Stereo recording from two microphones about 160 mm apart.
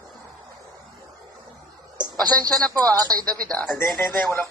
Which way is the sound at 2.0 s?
25° right (ahead or behind).